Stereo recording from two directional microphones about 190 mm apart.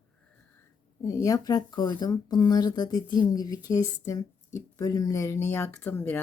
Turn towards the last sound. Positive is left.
turn(degrees=10)  # may be behind; listen again after turning